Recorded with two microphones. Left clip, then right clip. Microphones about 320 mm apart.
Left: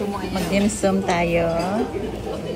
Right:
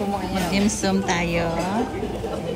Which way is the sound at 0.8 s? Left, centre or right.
Centre.